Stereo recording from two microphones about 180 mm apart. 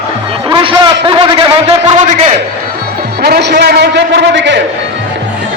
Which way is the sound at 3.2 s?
65° right (ahead or behind).